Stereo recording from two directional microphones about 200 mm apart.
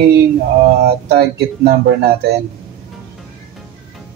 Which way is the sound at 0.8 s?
55° right (ahead or behind).